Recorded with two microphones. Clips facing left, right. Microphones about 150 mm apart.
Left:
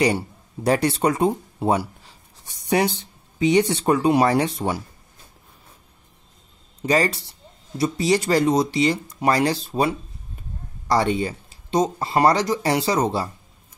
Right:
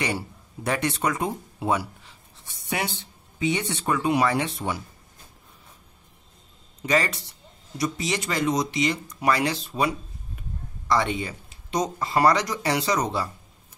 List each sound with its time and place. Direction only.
0.7 s speech: 35° left (ahead or behind)
6.9 s speech: 35° left (ahead or behind)